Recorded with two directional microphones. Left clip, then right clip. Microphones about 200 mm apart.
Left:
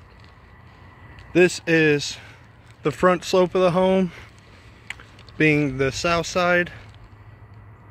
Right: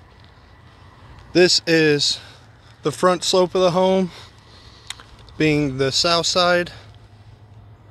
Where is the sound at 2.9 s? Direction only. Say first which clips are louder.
Right 2 dB; 5° left (ahead or behind).